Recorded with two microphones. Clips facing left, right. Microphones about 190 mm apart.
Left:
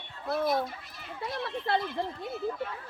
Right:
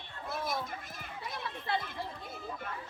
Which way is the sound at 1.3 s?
55° left (ahead or behind).